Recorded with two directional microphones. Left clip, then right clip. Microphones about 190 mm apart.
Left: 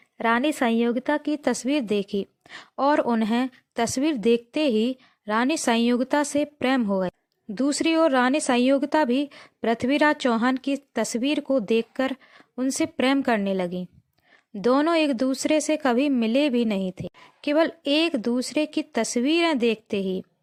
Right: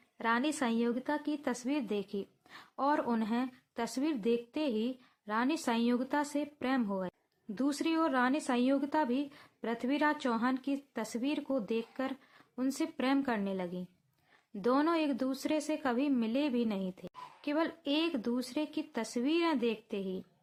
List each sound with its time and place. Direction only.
0.2 s a woman's voice: 40° left (ahead or behind)